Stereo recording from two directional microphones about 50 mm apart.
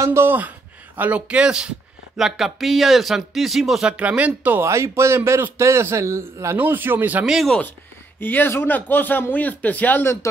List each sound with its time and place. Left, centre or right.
0.0 s speech: right
0.3 s a sound: right
1.2 s speech: right
2.1 s speech: centre
3.9 s speech: right
4.6 s a man's voice: right
6.5 s speech: right
8.2 s speech: left
10.2 s speech: left